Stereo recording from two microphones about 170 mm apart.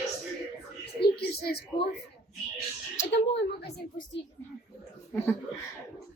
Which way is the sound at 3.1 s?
90° left.